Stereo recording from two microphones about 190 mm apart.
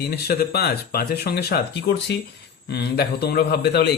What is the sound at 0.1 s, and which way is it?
A man's voice, 55° left (ahead or behind).